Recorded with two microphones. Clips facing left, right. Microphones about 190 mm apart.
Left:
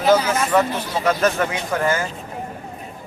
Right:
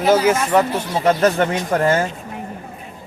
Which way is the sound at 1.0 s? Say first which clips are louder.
Right 4 dB; 30° right (ahead or behind).